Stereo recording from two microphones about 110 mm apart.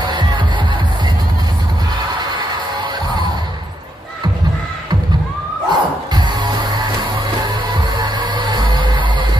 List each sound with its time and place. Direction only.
0.0 s music: 40° right (ahead or behind)
5.7 s music: 40° right (ahead or behind)
8.2 s music: 45° right (ahead or behind)